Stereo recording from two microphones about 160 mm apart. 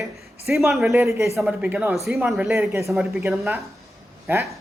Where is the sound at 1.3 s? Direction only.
Centre (ahead or behind).